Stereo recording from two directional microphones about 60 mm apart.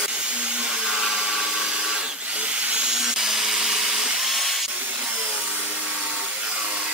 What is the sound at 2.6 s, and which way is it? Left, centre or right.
Wood, centre.